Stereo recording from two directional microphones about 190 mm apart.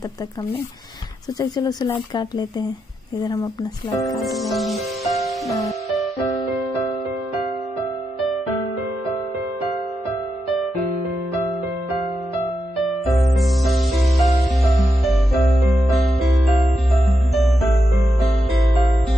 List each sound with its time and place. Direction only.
1.4 s speech: 20° left (ahead or behind)
4.2 s music: centre (ahead or behind)
12.8 s music: centre (ahead or behind)